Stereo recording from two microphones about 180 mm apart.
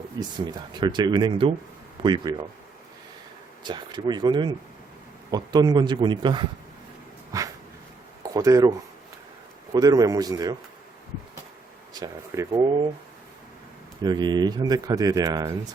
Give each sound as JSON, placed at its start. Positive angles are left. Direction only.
{"t": 0.2, "sound": "speech", "side_deg": -25}
{"t": 3.6, "sound": "speech", "side_deg": -25}
{"t": 8.2, "sound": "speech", "side_deg": -20}
{"t": 9.7, "sound": "speech", "side_deg": -20}
{"t": 11.9, "sound": "speech", "side_deg": -20}
{"t": 14.0, "sound": "speech", "side_deg": -25}